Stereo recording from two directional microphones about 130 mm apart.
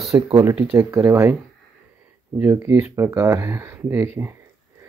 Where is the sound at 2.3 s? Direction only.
20° right (ahead or behind).